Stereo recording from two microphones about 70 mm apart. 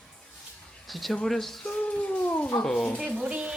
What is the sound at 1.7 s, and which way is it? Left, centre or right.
Speech, centre.